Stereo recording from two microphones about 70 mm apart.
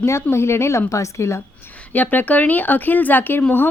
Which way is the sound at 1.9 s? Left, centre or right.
Left.